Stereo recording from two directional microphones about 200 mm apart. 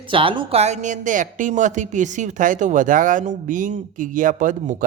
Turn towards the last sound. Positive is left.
turn(degrees=-40)  # may be behind; listen again after turning